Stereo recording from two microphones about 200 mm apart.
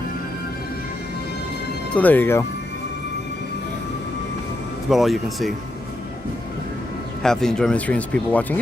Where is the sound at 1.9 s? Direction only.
10° left (ahead or behind).